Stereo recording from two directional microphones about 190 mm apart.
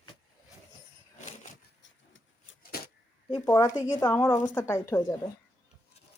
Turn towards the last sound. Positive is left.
turn(degrees=15)  # may be behind; listen again after turning